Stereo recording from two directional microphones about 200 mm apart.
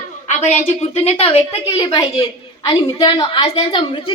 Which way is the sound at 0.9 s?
30° left (ahead or behind).